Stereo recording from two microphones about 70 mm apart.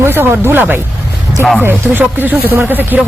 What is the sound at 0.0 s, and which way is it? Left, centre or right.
Speech, right.